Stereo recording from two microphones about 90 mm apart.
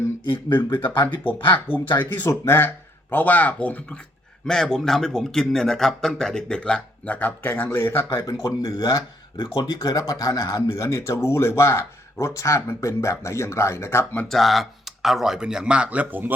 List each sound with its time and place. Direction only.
0.5 s speech: 65° left (ahead or behind)
2.0 s speech: 25° left (ahead or behind)
4.4 s speech: 5° left (ahead or behind); by 8.2 s 25° left (ahead or behind)
8.2 s speech: 40° left (ahead or behind); by 14.3 s 20° left (ahead or behind)
14.3 s speech: centre (ahead or behind); by 16.3 s 20° right (ahead or behind)